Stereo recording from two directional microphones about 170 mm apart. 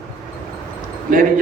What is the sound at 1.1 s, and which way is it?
Speech, 55° right (ahead or behind).